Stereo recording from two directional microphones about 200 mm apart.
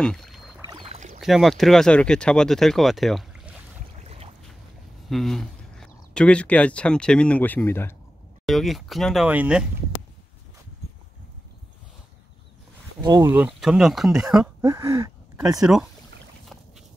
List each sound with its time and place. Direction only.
0.0 s rowboat: 5° left (ahead or behind)
0.7 s rowboat: 25° right (ahead or behind)
0.9 s rowboat: 35° right (ahead or behind)
1.2 s speech: centre (ahead or behind)
4.0 s boat: 30° right (ahead or behind)
5.0 s speech: centre (ahead or behind)
8.5 s speech: centre (ahead or behind)
13.0 s speech: 20° right (ahead or behind)
14.6 s speech: 15° right (ahead or behind)
15.4 s speech: centre (ahead or behind)